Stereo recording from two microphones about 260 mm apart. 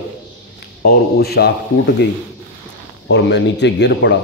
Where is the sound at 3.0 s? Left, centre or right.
Left.